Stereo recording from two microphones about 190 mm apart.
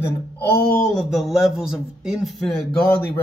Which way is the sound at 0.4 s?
55° left (ahead or behind).